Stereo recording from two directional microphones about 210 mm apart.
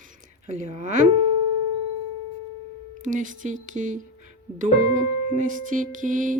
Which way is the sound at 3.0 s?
35° right (ahead or behind).